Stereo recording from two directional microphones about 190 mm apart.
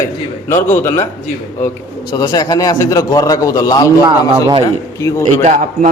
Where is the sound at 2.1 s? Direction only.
20° left (ahead or behind).